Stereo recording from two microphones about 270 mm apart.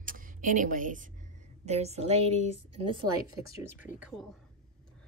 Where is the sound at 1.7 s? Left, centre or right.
Right.